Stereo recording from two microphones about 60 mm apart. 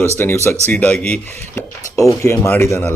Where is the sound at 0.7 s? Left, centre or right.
Left.